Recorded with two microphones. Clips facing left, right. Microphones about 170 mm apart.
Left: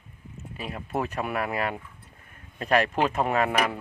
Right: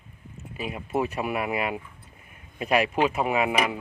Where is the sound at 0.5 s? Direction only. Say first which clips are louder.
Right 3 dB; 5° right (ahead or behind).